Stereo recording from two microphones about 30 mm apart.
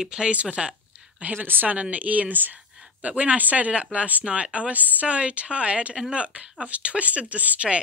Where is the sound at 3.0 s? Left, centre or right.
Right.